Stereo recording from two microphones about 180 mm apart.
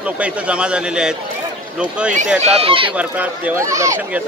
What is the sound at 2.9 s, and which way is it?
Speech, 10° right (ahead or behind).